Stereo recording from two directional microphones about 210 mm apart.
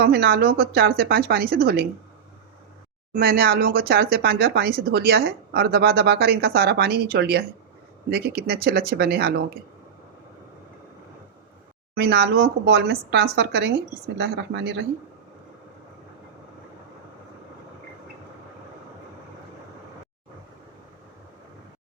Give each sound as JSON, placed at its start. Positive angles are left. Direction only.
{"t": 0.0, "sound": "speech", "side_deg": -50}
{"t": 3.1, "sound": "speech", "side_deg": -45}
{"t": 11.9, "sound": "speech", "side_deg": -50}